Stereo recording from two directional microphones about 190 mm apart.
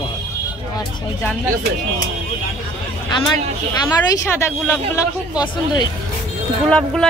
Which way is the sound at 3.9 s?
15° left (ahead or behind).